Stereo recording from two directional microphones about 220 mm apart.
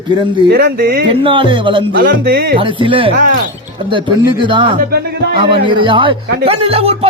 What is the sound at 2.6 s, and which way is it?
Speech, 25° right (ahead or behind).